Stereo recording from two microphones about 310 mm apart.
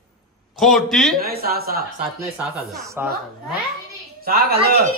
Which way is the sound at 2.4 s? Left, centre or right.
Centre.